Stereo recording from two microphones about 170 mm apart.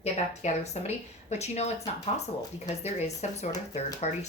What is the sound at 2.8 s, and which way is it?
A woman's voice, 40° left (ahead or behind).